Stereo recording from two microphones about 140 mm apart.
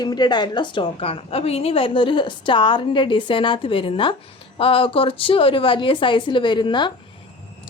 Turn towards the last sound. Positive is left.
turn(degrees=35)  # may be behind; listen again after turning